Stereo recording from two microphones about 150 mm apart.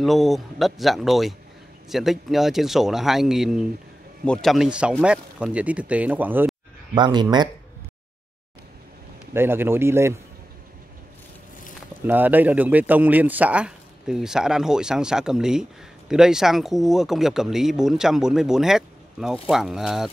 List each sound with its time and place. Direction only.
0.0 s speech: centre (ahead or behind)
7.0 s speech: 30° right (ahead or behind)
9.3 s speech: 15° right (ahead or behind)
12.1 s speech: 10° right (ahead or behind)